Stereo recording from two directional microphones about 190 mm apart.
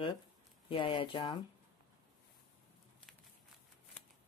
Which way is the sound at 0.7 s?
25° left (ahead or behind).